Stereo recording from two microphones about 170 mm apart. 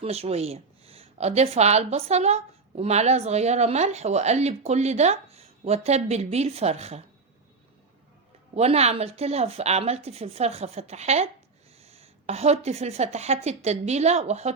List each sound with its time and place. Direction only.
0.0 s speech: 35° right (ahead or behind)
8.5 s speech: 40° right (ahead or behind)